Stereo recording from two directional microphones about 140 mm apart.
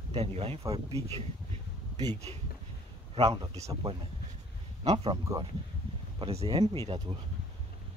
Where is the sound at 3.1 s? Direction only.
45° right (ahead or behind).